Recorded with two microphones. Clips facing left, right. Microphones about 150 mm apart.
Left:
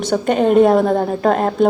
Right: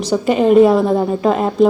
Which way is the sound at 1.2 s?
50° left (ahead or behind).